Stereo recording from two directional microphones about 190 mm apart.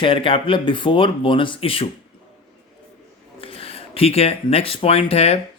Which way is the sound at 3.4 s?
30° left (ahead or behind).